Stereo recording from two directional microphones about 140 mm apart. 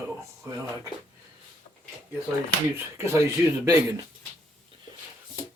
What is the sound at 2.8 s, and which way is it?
Speech, 20° right (ahead or behind).